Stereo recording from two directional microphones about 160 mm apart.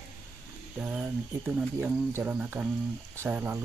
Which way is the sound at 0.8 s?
5° right (ahead or behind).